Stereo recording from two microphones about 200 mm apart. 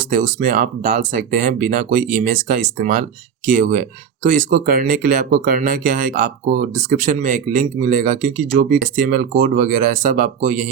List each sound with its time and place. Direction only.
0.1 s speech: 45° right (ahead or behind)